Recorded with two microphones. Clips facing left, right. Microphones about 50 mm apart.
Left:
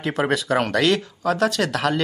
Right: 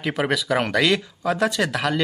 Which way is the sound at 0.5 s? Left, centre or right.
Centre.